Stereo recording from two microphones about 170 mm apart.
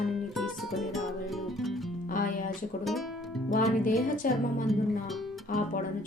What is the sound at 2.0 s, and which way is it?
Music, 55° left (ahead or behind).